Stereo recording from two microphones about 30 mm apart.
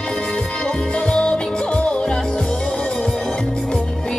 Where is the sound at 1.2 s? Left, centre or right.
Left.